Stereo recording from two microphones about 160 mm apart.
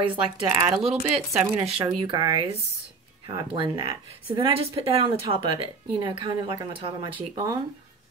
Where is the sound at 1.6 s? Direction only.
35° right (ahead or behind).